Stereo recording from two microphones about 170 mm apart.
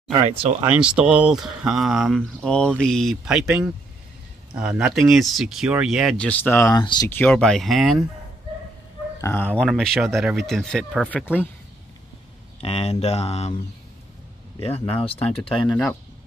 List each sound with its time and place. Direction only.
0.3 s speech: 35° right (ahead or behind)
0.7 s speech: 5° right (ahead or behind)
4.6 s speech: 5° right (ahead or behind); by 6.8 s 15° left (ahead or behind)
6.8 s speech: 25° left (ahead or behind)
7.1 s speech: 5° left (ahead or behind)
9.2 s speech: 10° left (ahead or behind)
12.5 s speech: 35° left (ahead or behind)
14.6 s speech: 35° left (ahead or behind)
15.7 s speech: 10° left (ahead or behind)